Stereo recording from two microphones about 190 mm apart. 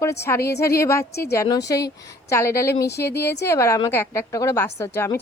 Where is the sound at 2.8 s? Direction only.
60° left (ahead or behind).